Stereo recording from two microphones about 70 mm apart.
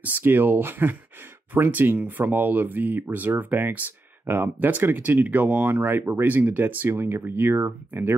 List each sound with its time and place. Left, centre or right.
0.0 s speech: right